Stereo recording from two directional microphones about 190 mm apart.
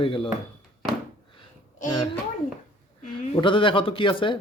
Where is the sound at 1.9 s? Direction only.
20° left (ahead or behind).